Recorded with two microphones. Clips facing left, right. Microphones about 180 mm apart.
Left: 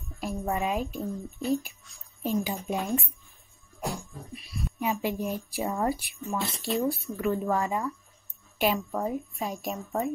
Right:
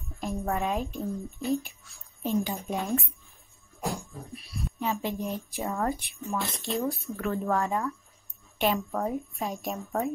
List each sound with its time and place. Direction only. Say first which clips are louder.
0.2 s a woman's voice: even; centre (ahead or behind)
3.8 s music: right 1 dB; centre (ahead or behind)
4.9 s a woman's voice: left 2 dB; 10° left (ahead or behind)